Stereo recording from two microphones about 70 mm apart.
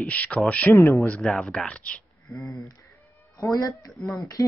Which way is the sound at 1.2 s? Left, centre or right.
Centre.